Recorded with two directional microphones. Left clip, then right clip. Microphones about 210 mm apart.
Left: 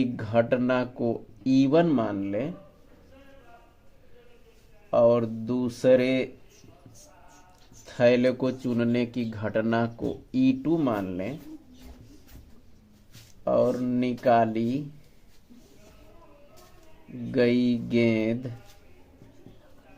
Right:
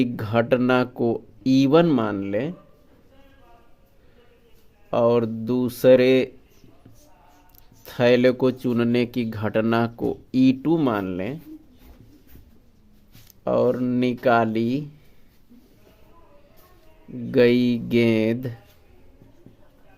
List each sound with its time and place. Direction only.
0.0 s speech: 50° right (ahead or behind)
4.9 s speech: 55° right (ahead or behind)
7.9 s speech: 50° right (ahead or behind)
13.4 s speech: 55° right (ahead or behind)
17.3 s speech: 55° right (ahead or behind)